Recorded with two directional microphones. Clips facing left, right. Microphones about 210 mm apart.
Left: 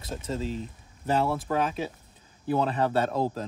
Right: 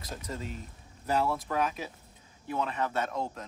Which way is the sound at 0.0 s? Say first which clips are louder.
Left 7 dB; 25° left (ahead or behind).